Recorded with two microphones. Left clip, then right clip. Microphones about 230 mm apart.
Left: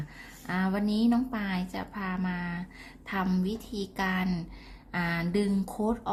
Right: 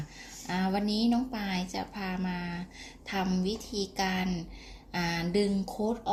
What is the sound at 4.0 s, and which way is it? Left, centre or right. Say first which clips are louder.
A woman's voice: left 2 dB; centre.